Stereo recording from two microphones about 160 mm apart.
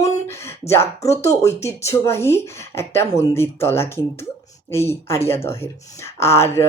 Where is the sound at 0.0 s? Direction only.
15° left (ahead or behind).